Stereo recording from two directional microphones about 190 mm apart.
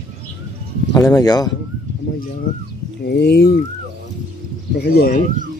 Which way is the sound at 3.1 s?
60° left (ahead or behind).